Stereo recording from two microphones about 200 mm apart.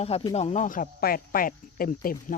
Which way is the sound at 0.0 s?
30° left (ahead or behind).